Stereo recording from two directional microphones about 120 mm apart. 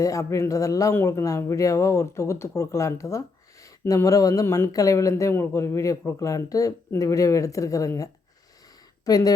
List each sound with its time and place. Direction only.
0.0 s a woman's voice: 25° left (ahead or behind)